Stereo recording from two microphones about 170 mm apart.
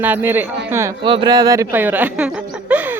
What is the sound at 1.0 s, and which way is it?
Speech, 30° right (ahead or behind).